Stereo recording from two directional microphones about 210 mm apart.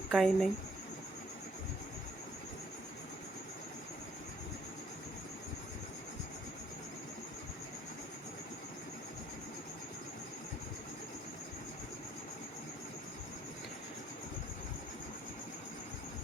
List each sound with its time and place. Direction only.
0.1 s speech: centre (ahead or behind)